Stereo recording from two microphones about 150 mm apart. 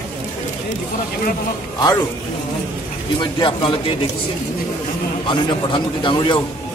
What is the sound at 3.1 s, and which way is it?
Speech, 35° left (ahead or behind).